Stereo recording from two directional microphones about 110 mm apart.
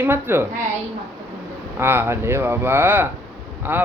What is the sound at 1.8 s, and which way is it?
A woman's voice, 20° right (ahead or behind).